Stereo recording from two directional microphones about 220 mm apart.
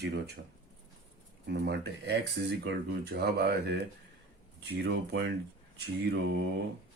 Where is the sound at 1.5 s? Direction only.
50° right (ahead or behind).